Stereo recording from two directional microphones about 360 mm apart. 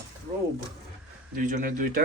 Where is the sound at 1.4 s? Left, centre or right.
Right.